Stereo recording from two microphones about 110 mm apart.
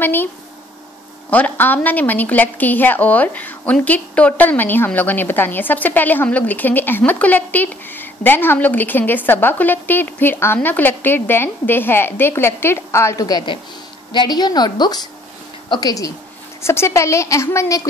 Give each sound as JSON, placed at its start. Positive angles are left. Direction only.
{"t": 0.0, "sound": "a woman's voice", "side_deg": 20}
{"t": 1.3, "sound": "a woman's voice", "side_deg": 15}
{"t": 16.6, "sound": "a woman's voice", "side_deg": 25}